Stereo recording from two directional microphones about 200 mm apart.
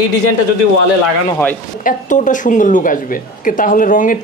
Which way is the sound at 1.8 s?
40° left (ahead or behind).